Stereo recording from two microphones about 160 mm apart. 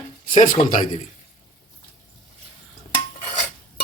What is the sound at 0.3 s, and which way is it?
Speech, 55° left (ahead or behind).